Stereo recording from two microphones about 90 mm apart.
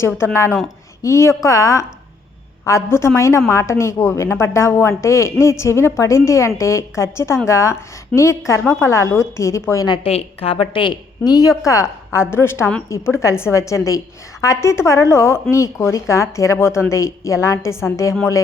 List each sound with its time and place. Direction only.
0.2 s a woman's voice: 25° left (ahead or behind)
10.0 s a woman's voice: 90° left; by 10.9 s 70° left (ahead or behind)
11.3 s a woman's voice: 40° left (ahead or behind)